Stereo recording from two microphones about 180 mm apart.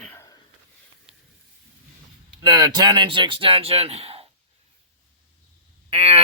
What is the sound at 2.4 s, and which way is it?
Speech, 20° right (ahead or behind).